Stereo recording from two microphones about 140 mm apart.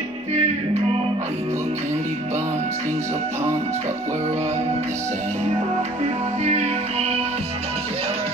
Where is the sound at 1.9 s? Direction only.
55° right (ahead or behind).